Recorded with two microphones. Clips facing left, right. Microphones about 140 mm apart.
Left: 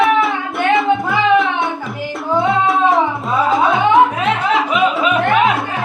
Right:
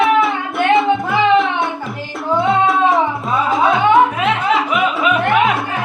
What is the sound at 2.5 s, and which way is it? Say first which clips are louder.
Music: right 1 dB; centre (ahead or behind).